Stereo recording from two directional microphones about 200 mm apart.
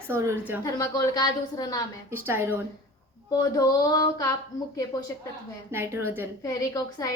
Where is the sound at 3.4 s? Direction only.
20° left (ahead or behind).